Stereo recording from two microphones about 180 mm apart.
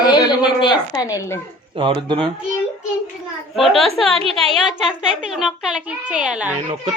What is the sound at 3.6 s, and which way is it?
Speech, centre (ahead or behind).